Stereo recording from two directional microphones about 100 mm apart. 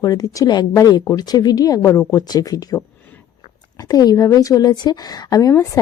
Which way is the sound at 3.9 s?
40° left (ahead or behind).